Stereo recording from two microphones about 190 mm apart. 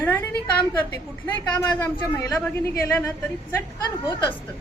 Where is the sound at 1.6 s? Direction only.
10° left (ahead or behind).